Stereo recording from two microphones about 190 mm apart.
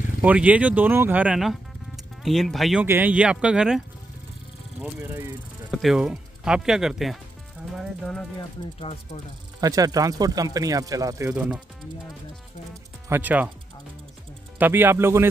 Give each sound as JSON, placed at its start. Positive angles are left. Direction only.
{"t": 0.2, "sound": "a man's voice", "side_deg": -10}
{"t": 8.7, "sound": "speech", "side_deg": 30}
{"t": 9.6, "sound": "speech", "side_deg": -20}
{"t": 13.1, "sound": "speech", "side_deg": -10}
{"t": 14.6, "sound": "speech", "side_deg": -10}